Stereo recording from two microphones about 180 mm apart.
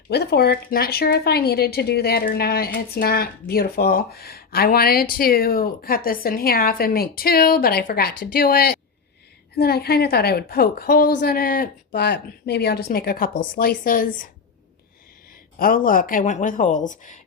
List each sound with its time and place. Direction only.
0.1 s speech: 60° left (ahead or behind)
15.5 s speech: 50° left (ahead or behind)